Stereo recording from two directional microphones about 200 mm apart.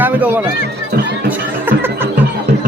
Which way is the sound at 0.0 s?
10° right (ahead or behind).